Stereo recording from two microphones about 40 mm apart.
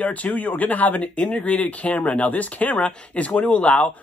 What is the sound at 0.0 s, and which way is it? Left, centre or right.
Speech, left.